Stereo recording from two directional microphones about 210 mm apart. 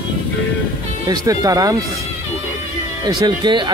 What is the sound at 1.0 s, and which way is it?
Speech, 20° right (ahead or behind).